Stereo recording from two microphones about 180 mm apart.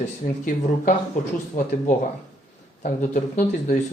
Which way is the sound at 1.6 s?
45° left (ahead or behind).